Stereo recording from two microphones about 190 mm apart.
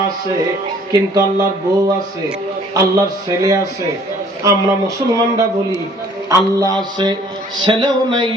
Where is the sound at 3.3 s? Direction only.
15° right (ahead or behind).